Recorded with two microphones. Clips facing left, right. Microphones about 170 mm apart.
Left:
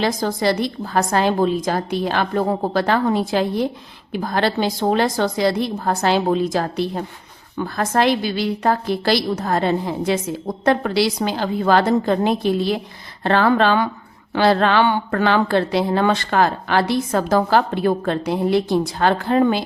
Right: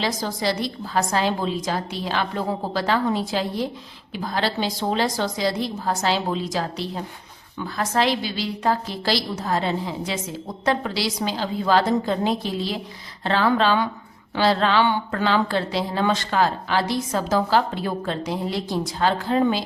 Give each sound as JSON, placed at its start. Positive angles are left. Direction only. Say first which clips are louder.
{"t": 0.0, "sound": "a woman's voice", "louder": "left 5 dB", "side_deg": 50}